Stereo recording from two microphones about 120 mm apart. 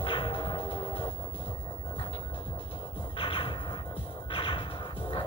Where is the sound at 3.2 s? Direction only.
45° left (ahead or behind).